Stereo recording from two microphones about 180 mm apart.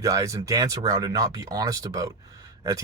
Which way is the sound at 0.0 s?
20° right (ahead or behind).